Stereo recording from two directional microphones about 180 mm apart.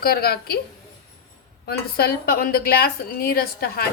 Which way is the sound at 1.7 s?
60° left (ahead or behind).